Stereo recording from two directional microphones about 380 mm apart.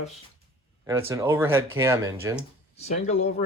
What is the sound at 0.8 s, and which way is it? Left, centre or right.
Speech, centre.